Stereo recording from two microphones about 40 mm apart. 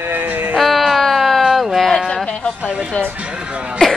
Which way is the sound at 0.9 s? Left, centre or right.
Centre.